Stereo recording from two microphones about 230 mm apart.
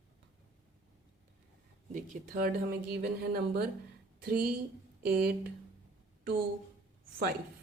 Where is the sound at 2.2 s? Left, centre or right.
Right.